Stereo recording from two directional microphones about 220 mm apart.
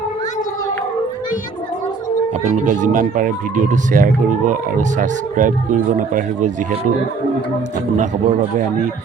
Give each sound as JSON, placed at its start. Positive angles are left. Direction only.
{"t": 2.4, "sound": "speech", "side_deg": -35}